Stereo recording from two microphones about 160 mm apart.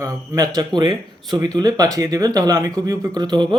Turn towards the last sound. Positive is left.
turn(degrees=-25)  # may be behind; listen again after turning